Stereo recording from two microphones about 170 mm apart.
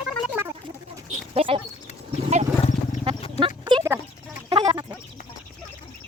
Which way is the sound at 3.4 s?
30° right (ahead or behind).